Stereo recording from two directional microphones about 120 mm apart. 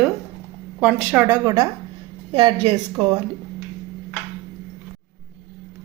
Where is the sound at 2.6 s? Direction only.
45° right (ahead or behind).